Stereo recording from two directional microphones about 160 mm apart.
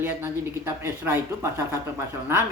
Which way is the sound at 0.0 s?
15° right (ahead or behind).